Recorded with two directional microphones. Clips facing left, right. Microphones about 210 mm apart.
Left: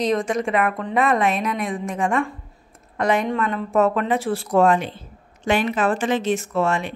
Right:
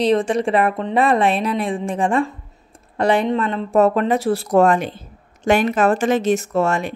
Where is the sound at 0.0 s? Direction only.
30° right (ahead or behind).